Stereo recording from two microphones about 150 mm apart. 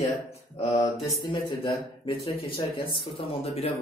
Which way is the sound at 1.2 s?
30° left (ahead or behind).